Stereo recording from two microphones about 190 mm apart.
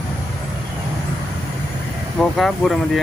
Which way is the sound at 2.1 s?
Centre (ahead or behind).